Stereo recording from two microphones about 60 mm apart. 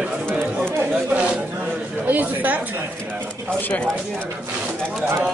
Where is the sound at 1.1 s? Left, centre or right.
Right.